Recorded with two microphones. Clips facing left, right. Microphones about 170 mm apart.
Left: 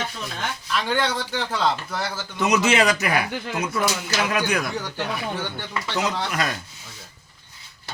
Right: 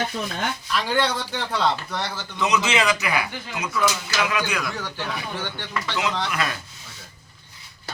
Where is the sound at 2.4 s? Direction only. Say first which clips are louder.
Left 3 dB; 50° left (ahead or behind).